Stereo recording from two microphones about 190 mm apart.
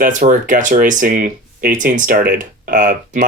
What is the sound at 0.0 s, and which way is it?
Speech, 40° right (ahead or behind).